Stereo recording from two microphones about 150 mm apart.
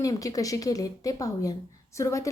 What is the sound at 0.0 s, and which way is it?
A woman's voice, 25° left (ahead or behind).